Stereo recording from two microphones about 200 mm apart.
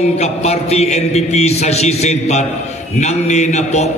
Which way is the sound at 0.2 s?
30° left (ahead or behind).